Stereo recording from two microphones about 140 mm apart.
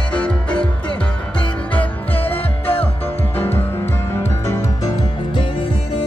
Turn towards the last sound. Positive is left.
turn(degrees=20)  # may be behind; listen again after turning